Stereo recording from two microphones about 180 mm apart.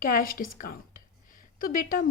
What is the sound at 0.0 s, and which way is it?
Speech, 50° left (ahead or behind).